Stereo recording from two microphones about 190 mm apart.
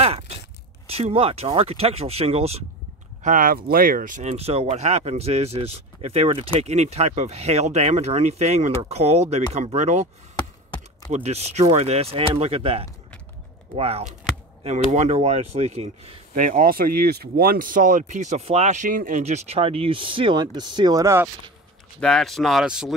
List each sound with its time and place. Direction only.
0.8 s speech: 30° right (ahead or behind)
3.2 s speech: 45° right (ahead or behind)
11.1 s speech: 35° right (ahead or behind); by 21.3 s 15° right (ahead or behind)
22.0 s speech: 5° left (ahead or behind)